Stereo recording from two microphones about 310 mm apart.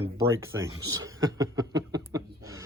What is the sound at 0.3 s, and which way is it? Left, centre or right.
Speech, centre.